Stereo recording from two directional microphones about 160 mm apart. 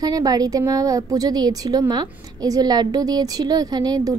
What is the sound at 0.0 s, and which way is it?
A woman's voice, 25° right (ahead or behind).